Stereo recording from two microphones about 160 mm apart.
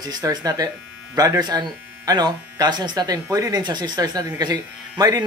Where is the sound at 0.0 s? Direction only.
25° right (ahead or behind).